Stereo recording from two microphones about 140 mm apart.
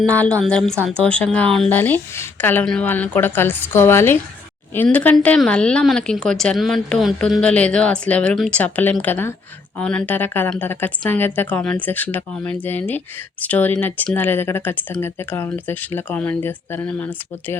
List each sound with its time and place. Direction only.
0.1 s speech: 10° left (ahead or behind)